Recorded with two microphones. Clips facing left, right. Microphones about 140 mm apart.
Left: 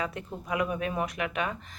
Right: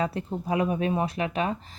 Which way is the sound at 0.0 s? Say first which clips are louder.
Right 6 dB; 35° right (ahead or behind).